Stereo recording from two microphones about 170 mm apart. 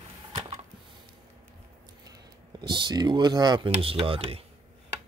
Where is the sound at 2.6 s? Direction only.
25° right (ahead or behind).